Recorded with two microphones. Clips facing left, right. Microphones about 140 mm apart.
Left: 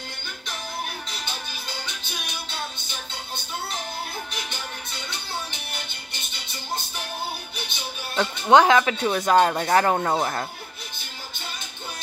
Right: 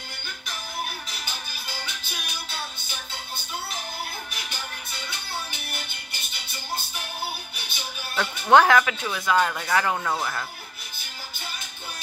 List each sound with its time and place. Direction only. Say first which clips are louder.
8.2 s speech: left 1 dB; 20° left (ahead or behind)
8.8 s speech: left 5 dB; 40° left (ahead or behind)